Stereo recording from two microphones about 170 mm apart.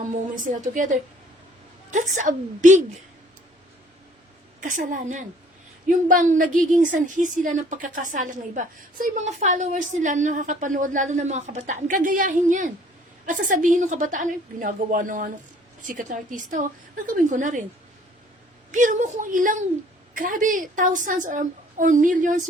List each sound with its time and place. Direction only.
0.3 s a woman's voice: 50° right (ahead or behind)
4.6 s a woman's voice: 50° right (ahead or behind)
18.7 s a woman's voice: 50° right (ahead or behind)